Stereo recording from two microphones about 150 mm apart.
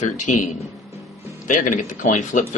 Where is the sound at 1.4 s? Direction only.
60° left (ahead or behind).